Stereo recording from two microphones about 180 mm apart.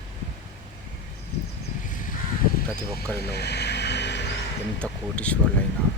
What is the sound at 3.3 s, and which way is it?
Vehicle, 65° left (ahead or behind).